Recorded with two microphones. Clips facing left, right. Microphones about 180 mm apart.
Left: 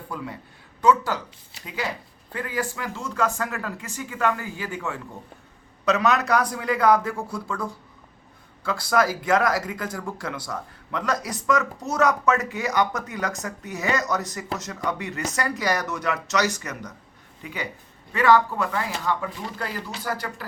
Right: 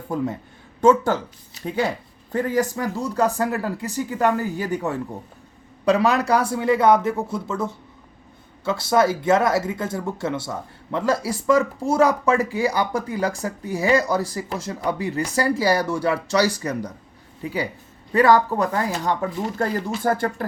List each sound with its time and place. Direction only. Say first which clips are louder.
0.1 s speech: right 10 dB; 45° right (ahead or behind)